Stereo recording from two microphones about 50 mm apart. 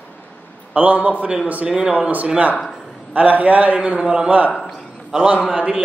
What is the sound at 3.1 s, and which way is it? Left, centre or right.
A man's voice, right.